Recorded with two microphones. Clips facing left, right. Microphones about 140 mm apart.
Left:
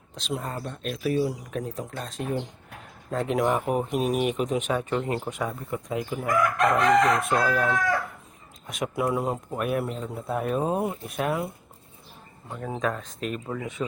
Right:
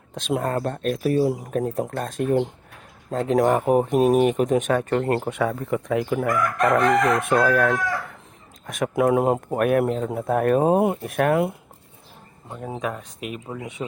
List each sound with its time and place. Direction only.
0.1 s speech: 55° right (ahead or behind)
3.1 s speech: 35° right (ahead or behind); by 11.5 s 60° right (ahead or behind)
12.5 s speech: 15° right (ahead or behind)